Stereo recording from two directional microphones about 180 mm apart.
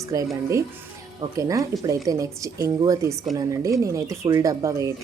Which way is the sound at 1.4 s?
20° right (ahead or behind).